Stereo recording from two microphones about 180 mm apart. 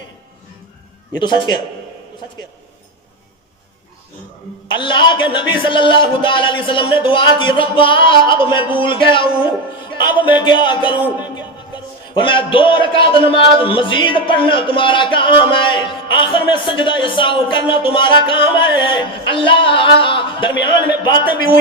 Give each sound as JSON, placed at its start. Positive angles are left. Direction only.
{"t": 1.2, "sound": "a man's voice", "side_deg": 25}
{"t": 4.8, "sound": "a man's voice", "side_deg": 25}
{"t": 12.2, "sound": "a man's voice", "side_deg": 25}